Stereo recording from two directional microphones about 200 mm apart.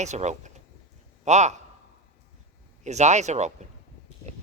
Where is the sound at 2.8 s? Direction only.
35° right (ahead or behind).